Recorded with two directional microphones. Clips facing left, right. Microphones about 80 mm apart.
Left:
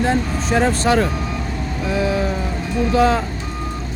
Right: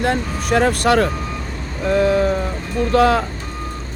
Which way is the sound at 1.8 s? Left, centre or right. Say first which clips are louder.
Right 5 dB; right.